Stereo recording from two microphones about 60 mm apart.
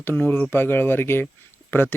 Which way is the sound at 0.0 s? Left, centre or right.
Left.